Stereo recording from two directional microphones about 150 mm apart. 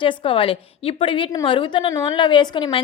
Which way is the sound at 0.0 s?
35° left (ahead or behind).